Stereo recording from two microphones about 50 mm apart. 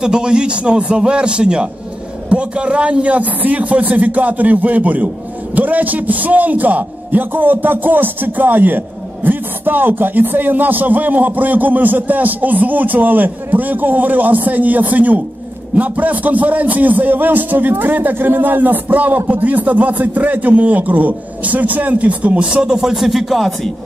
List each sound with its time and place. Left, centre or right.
0.0 s a man's voice: centre